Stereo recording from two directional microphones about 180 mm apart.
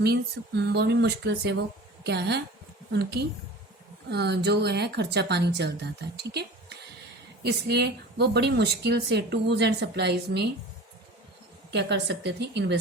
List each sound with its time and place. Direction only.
0.0 s a woman's voice: 65° right (ahead or behind)
11.7 s a woman's voice: 70° right (ahead or behind)